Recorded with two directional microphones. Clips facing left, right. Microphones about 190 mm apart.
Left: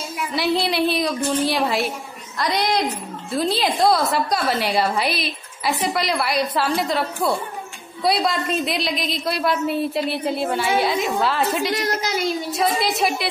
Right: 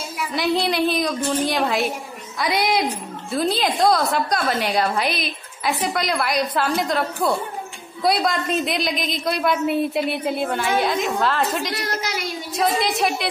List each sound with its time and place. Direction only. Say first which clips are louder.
0.3 s a woman's voice: even; centre (ahead or behind)
11.7 s speech: left 3 dB; 20° left (ahead or behind)
12.5 s a woman's voice: right 3 dB; centre (ahead or behind)